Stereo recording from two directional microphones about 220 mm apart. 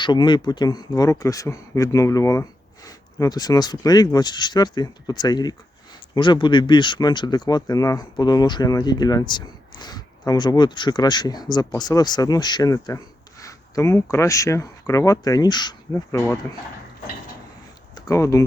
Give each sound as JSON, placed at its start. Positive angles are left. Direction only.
{"t": 0.0, "sound": "speech", "side_deg": 20}
{"t": 17.9, "sound": "speech", "side_deg": 15}